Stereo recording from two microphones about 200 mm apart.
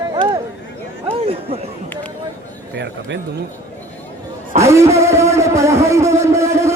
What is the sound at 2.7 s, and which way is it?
Speech, 60° right (ahead or behind).